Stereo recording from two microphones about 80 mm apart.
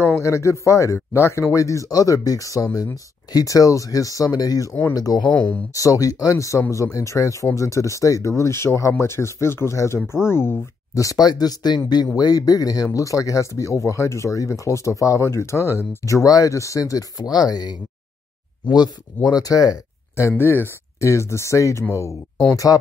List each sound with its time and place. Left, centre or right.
0.0 s speech: left
11.0 s speech: left
16.0 s speech: left
17.2 s speech: left
19.2 s speech: left
20.2 s speech: left